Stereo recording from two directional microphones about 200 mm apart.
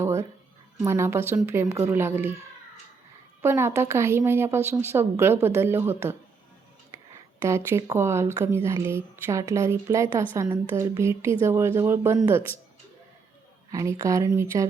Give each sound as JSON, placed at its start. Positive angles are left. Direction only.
{"t": 0.0, "sound": "a sound", "side_deg": -15}
{"t": 0.8, "sound": "speech", "side_deg": -15}
{"t": 3.4, "sound": "speech", "side_deg": -10}
{"t": 7.4, "sound": "speech", "side_deg": -15}
{"t": 13.7, "sound": "speech", "side_deg": -15}